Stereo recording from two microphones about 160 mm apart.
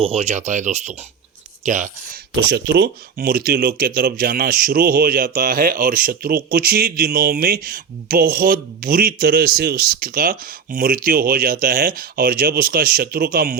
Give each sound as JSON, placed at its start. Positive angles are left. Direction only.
{"t": 0.0, "sound": "speech", "side_deg": -40}
{"t": 2.3, "sound": "speech", "side_deg": -90}